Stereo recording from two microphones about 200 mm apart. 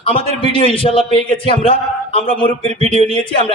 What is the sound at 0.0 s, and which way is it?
A man's voice, 25° left (ahead or behind).